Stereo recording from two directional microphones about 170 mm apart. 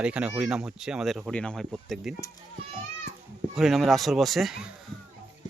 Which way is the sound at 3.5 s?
Centre (ahead or behind).